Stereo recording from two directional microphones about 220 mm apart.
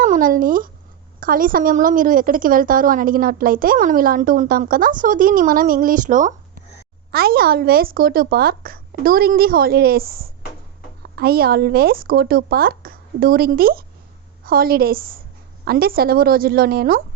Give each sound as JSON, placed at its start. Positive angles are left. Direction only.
{"t": 0.0, "sound": "a woman's voice", "side_deg": -40}